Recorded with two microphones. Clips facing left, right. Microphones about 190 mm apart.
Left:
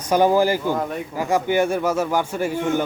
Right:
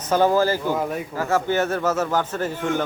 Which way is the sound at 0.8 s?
5° right (ahead or behind).